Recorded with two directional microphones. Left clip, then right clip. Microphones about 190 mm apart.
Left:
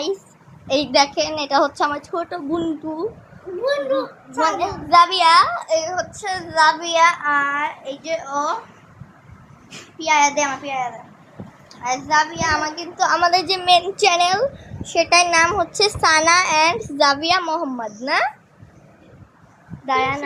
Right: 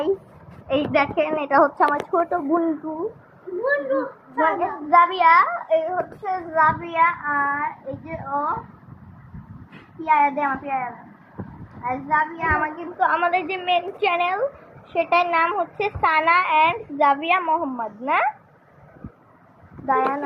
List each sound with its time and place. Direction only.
0.7 s a child's voice: 15° left (ahead or behind)
1.2 s a child's voice: centre (ahead or behind)
3.6 s a child's voice: 15° left (ahead or behind)
10.0 s a child's voice: centre (ahead or behind)
10.4 s a child's voice: 10° left (ahead or behind)
11.8 s a child's voice: centre (ahead or behind)
13.0 s a child's voice: 35° left (ahead or behind)
14.1 s a child's voice: 30° left (ahead or behind)